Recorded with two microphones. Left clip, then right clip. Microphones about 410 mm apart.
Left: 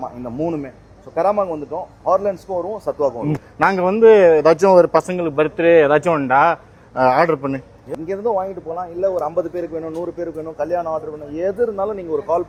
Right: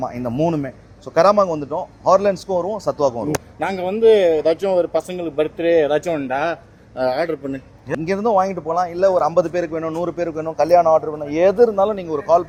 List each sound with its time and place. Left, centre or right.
0.0 s a man's voice: right
3.6 s speech: left
7.0 s speech: left
7.9 s a man's voice: right